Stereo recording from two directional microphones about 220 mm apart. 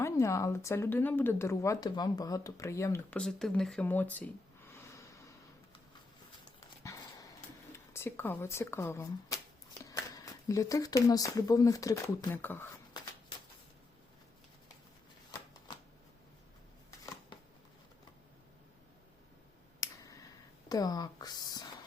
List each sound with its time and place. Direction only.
0.0 s speech: 15° left (ahead or behind)
6.8 s dog: 15° left (ahead or behind)
7.9 s speech: 10° left (ahead or behind)
15.3 s shuffling cards: 20° left (ahead or behind)
19.8 s a sound: 15° left (ahead or behind)
20.7 s speech: 15° left (ahead or behind)